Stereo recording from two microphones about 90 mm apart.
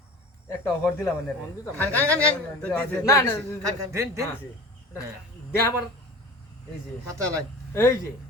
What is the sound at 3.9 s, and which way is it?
Speech, 35° right (ahead or behind).